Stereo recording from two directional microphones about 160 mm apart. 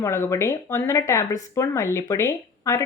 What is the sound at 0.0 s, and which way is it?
Speech, 15° left (ahead or behind).